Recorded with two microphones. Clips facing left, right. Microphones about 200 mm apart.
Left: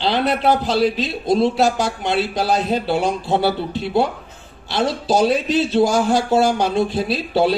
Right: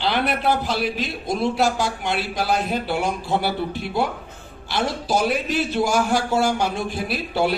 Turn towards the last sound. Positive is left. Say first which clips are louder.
# left 5 dB
turn(degrees=20)  # may be behind; listen again after turning